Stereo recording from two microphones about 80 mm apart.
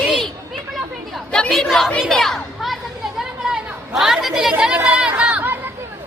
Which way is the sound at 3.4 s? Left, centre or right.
Centre.